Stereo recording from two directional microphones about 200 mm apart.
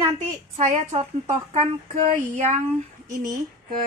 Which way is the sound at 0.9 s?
35° right (ahead or behind).